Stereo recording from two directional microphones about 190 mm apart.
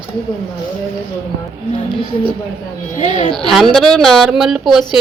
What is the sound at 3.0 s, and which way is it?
Speech, 40° left (ahead or behind).